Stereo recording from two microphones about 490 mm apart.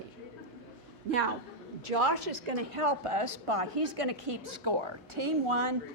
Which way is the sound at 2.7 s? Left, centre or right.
Right.